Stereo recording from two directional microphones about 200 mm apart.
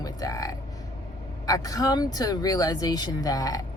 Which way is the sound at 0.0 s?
20° left (ahead or behind).